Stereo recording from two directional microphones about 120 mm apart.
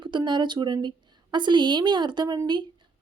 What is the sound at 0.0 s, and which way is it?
A woman's voice, 40° right (ahead or behind).